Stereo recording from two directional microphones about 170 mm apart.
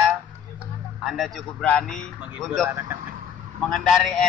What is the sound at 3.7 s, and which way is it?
Speech, centre (ahead or behind).